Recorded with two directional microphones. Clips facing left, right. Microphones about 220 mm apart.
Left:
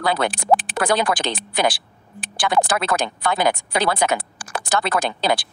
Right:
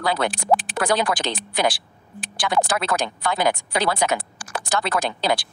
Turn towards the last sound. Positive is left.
turn(degrees=55)  # may be behind; listen again after turning